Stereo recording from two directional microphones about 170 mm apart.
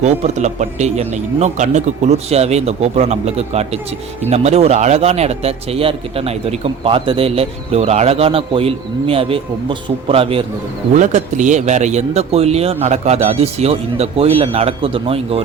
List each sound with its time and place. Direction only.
0.0 s a man's voice: 45° right (ahead or behind)
10.9 s a man's voice: 45° right (ahead or behind)